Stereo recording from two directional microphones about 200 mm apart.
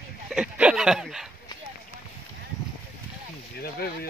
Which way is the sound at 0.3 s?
5° right (ahead or behind).